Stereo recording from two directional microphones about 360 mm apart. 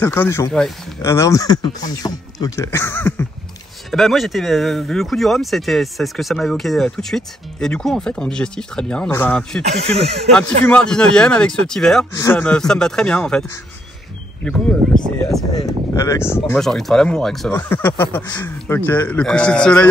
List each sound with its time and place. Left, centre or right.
0.0 s speech: centre
9.7 s speech: centre
10.6 s speech: centre